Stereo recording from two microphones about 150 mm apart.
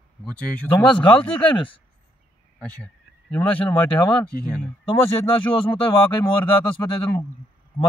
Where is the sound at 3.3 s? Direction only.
10° left (ahead or behind).